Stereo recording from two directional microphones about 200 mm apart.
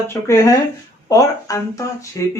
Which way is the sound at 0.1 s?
15° left (ahead or behind).